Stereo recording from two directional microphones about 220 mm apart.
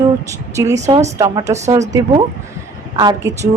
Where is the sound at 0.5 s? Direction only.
15° right (ahead or behind).